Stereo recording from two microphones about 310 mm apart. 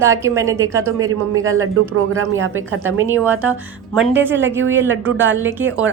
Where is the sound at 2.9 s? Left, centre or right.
Centre.